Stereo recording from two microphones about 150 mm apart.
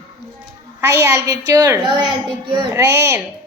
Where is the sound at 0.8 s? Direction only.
20° right (ahead or behind).